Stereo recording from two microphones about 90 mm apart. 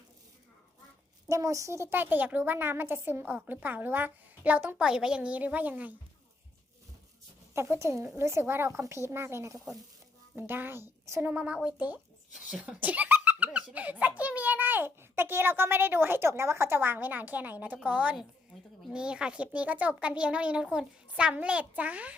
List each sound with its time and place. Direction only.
1.3 s a woman's voice: 35° right (ahead or behind); by 5.9 s 15° right (ahead or behind)
7.5 s a woman's voice: 30° right (ahead or behind)
11.3 s speech: 15° right (ahead or behind)
12.3 s speech: 5° right (ahead or behind)
12.6 s a sound: 15° right (ahead or behind)
13.7 s a woman's voice: 15° right (ahead or behind)